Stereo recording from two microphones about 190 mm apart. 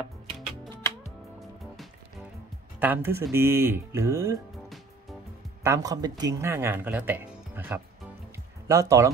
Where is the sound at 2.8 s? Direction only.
10° right (ahead or behind).